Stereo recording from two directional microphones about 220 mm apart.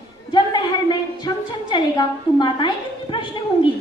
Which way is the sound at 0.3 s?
20° left (ahead or behind).